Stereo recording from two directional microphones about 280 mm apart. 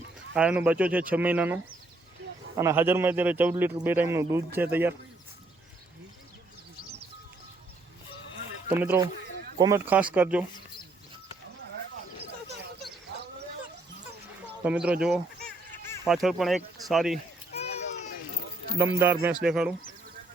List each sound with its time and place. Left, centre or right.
0.3 s a man's voice: centre
8.7 s a man's voice: centre
14.6 s speech: centre
17.5 s children playing: left
18.9 s speech: centre